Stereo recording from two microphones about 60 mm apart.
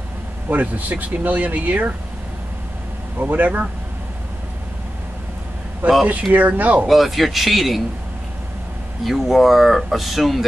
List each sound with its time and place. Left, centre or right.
0.5 s speech: right
3.2 s speech: right
5.8 s speech: right
6.9 s speech: centre
9.0 s speech: centre